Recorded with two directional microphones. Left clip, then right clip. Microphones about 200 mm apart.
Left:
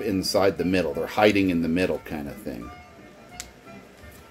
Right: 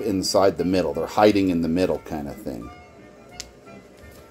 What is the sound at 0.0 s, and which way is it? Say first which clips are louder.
Speech: right 3 dB; 20° right (ahead or behind).